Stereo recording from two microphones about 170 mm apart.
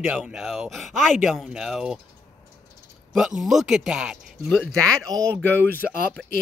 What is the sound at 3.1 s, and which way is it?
Speech, 5° right (ahead or behind).